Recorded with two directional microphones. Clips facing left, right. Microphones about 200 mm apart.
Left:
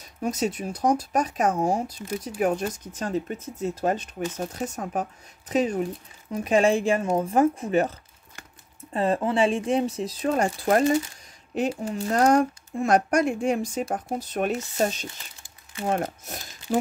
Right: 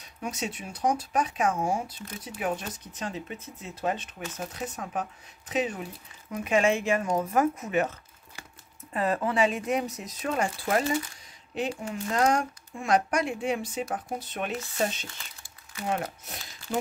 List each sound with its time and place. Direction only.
0.2 s speech: 40° left (ahead or behind)
8.9 s speech: 30° left (ahead or behind)